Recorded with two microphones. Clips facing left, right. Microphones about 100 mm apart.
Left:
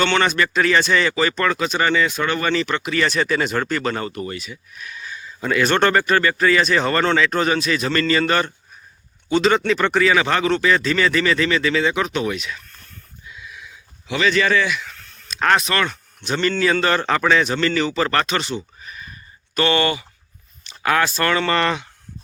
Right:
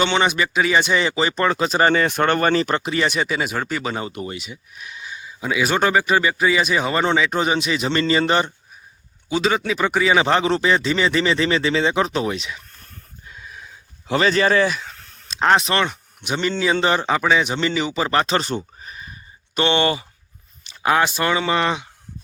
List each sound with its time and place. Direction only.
0.0 s speech: 15° right (ahead or behind); by 2.9 s 35° right (ahead or behind)
2.9 s speech: 20° right (ahead or behind)
9.3 s speech: 5° right (ahead or behind)
10.1 s speech: 25° right (ahead or behind)
13.2 s a sound: 40° right (ahead or behind)
15.4 s speech: 25° right (ahead or behind)
18.3 s a sound: 40° right (ahead or behind)
20.8 s speech: 20° right (ahead or behind)